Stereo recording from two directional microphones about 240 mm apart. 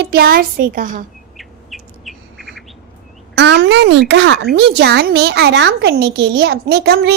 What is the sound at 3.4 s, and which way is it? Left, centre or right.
A child's voice, right.